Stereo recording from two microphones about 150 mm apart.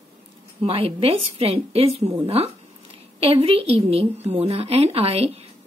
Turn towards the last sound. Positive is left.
turn(degrees=-40)  # may be behind; listen again after turning